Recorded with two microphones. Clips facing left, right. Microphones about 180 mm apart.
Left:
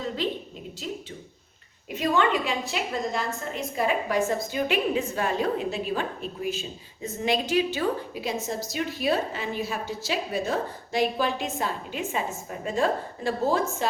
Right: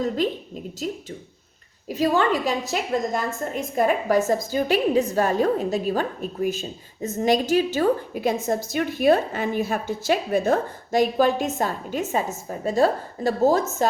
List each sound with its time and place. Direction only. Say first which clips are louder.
0.8 s a woman's voice: right 5 dB; 45° right (ahead or behind)